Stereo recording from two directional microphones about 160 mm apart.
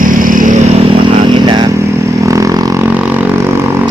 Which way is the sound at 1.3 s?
25° right (ahead or behind).